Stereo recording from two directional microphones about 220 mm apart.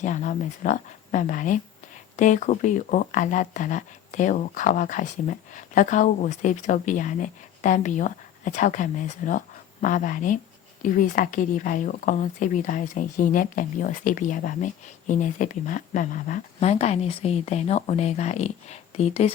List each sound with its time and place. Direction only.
0.0 s speech: 35° left (ahead or behind)